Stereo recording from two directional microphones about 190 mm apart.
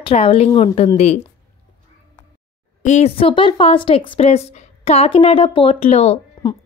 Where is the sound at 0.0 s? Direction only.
30° left (ahead or behind).